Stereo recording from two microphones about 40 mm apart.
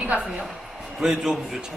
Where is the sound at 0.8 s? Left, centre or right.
Centre.